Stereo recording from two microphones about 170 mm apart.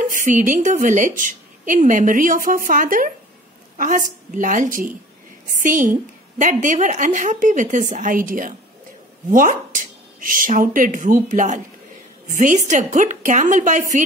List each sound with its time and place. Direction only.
0.1 s a woman's voice: 50° right (ahead or behind)